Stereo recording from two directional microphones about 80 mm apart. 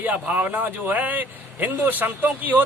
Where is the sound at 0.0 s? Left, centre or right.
Right.